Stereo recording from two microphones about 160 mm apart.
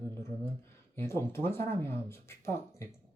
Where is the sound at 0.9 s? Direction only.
15° left (ahead or behind).